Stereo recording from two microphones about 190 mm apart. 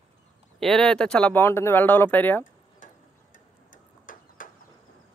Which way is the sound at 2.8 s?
45° left (ahead or behind).